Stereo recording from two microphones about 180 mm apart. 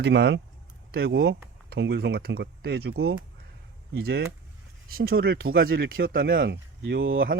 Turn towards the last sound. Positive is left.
turn(degrees=-85)